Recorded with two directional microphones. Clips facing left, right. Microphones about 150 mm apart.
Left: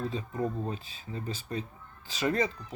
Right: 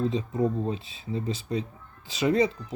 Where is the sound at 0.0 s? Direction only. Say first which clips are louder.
Right 6 dB; 20° right (ahead or behind).